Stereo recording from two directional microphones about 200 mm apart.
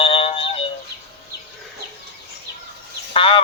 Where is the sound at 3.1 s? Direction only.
25° left (ahead or behind).